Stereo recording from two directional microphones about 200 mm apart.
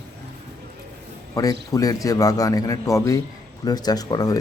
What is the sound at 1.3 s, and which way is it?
A man's voice, 15° left (ahead or behind).